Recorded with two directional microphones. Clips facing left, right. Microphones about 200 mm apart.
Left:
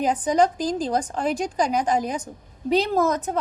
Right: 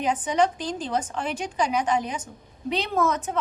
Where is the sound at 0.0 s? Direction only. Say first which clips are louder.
Left 3 dB; 40° left (ahead or behind).